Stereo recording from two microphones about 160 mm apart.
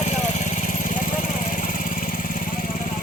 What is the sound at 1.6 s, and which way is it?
Vehicle, 55° left (ahead or behind).